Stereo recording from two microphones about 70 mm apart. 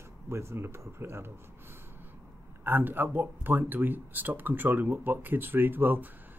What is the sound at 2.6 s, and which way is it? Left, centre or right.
Speech, right.